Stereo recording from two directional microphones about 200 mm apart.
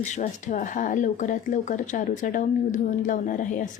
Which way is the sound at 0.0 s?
35° left (ahead or behind).